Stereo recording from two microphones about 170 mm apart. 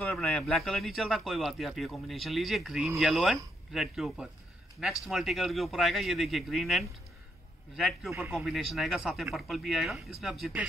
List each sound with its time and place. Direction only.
0.0 s speech: centre (ahead or behind)